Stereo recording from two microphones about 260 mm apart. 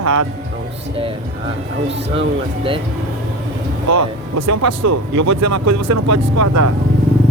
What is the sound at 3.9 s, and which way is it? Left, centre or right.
Speech, right.